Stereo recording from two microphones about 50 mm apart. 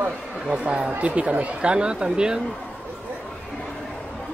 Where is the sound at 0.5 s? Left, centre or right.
Centre.